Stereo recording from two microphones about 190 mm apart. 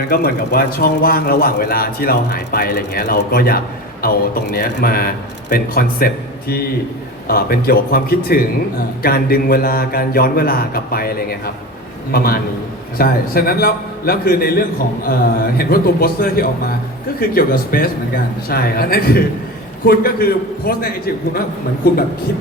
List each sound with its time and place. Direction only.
0.1 s a man's voice: 50° left (ahead or behind)
7.3 s a man's voice: 50° left (ahead or behind)